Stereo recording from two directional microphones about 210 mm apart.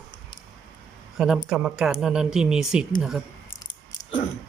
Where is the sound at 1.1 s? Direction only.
5° right (ahead or behind).